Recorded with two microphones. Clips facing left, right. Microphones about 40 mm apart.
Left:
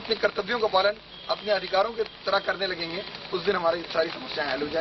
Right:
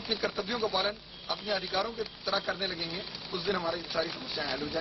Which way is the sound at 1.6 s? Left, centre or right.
Left.